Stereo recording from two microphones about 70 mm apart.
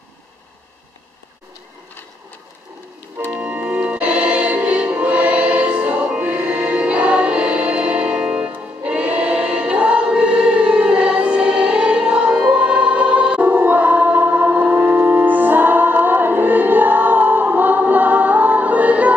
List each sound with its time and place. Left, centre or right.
3.3 s music: centre
13.5 s choir: right